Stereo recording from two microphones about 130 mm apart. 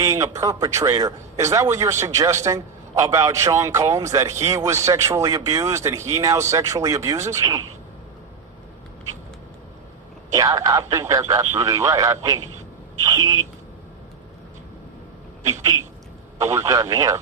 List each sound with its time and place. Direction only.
0.0 s a man's voice: 25° right (ahead or behind)
10.3 s a man's voice: 25° right (ahead or behind)
15.6 s a man's voice: 30° right (ahead or behind)